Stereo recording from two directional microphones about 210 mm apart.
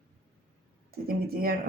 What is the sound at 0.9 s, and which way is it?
Speech, 45° right (ahead or behind).